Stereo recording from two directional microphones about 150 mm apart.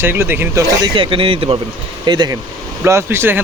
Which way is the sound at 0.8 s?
35° right (ahead or behind).